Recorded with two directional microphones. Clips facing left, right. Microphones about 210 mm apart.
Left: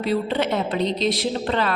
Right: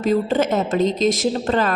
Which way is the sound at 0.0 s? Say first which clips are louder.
Right 4 dB; 45° right (ahead or behind).